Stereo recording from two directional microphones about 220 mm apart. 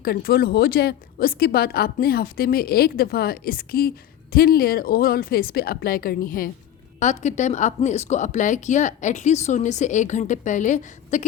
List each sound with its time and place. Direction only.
0.0 s a woman's voice: 45° left (ahead or behind)